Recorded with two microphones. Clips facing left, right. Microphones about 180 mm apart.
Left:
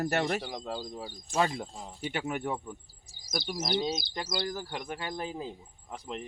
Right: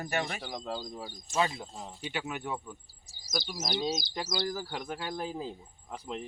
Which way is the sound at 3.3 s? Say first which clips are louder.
Even; 60° left (ahead or behind).